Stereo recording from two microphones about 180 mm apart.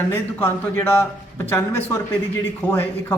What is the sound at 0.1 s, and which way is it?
Speech, 10° left (ahead or behind).